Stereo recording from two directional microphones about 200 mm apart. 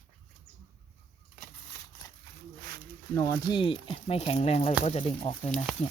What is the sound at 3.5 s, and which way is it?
Speech, 25° left (ahead or behind).